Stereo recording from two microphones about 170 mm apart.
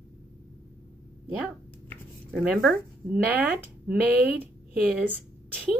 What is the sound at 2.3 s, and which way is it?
Speech, 5° right (ahead or behind).